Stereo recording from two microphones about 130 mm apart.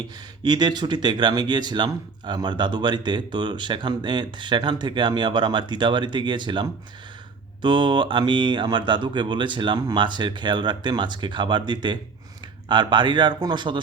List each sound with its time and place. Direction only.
0.4 s speech: 35° right (ahead or behind)